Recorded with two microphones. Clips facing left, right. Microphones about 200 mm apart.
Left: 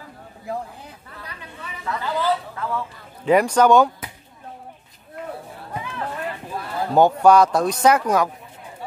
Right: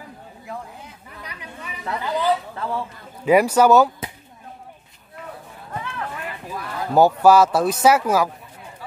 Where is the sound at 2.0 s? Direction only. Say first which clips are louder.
Right 1 dB; 15° right (ahead or behind).